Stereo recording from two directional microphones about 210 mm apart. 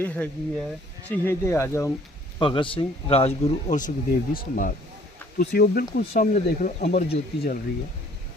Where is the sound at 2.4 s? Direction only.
25° left (ahead or behind); by 4.7 s 40° left (ahead or behind).